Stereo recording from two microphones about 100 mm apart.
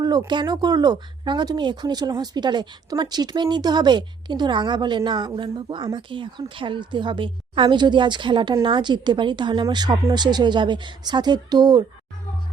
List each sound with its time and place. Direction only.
0.3 s speech: 45° right (ahead or behind)